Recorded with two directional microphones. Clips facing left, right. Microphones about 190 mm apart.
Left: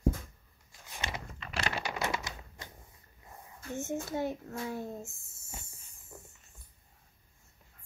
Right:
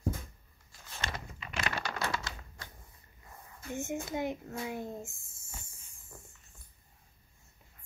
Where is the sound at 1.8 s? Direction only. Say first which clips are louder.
Left 1 dB; 15° left (ahead or behind).